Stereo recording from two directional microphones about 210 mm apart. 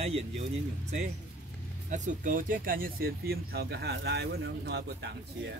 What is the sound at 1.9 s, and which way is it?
Speech, 35° right (ahead or behind).